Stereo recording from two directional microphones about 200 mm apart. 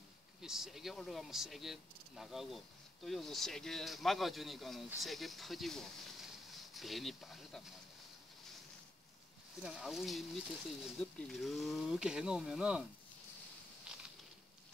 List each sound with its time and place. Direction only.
0.4 s speech: centre (ahead or behind)
9.6 s speech: centre (ahead or behind)
13.9 s a sound: 5° right (ahead or behind)